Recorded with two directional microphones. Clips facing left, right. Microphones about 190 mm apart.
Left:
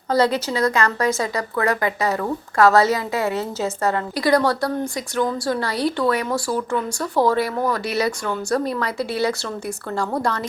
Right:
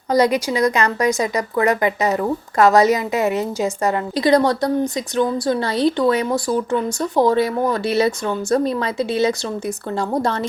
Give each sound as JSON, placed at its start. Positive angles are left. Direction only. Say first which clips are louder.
{"t": 0.1, "sound": "a woman's voice", "louder": "right 3 dB", "side_deg": -15}